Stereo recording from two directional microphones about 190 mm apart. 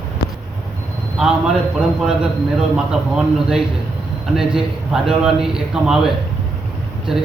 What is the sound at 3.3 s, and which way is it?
A man's voice, centre (ahead or behind).